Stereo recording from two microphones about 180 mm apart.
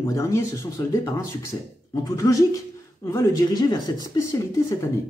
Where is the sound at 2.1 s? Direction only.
20° left (ahead or behind).